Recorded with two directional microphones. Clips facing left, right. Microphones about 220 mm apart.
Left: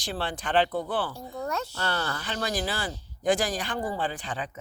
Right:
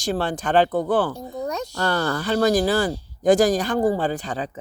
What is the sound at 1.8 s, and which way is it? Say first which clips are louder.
Speech: right 8 dB; 40° right (ahead or behind).